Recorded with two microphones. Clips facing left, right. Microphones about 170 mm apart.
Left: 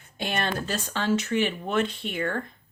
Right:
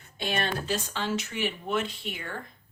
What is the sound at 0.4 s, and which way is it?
Speech, 50° left (ahead or behind).